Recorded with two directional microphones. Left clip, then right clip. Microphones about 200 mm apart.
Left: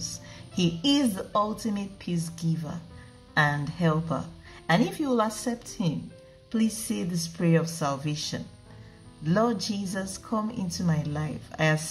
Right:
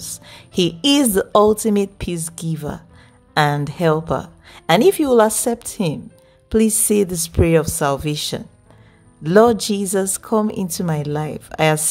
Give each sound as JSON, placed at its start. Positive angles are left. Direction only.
{"t": 0.8, "sound": "a woman's voice", "side_deg": -65}